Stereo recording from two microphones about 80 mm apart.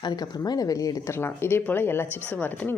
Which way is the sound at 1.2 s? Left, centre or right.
Left.